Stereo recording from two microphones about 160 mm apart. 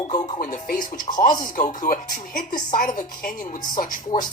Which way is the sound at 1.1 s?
25° left (ahead or behind).